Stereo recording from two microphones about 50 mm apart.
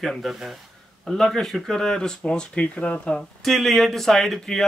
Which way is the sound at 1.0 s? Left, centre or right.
Centre.